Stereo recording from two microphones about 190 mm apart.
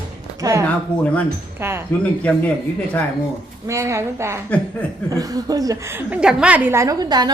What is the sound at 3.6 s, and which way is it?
A woman's voice, 15° right (ahead or behind).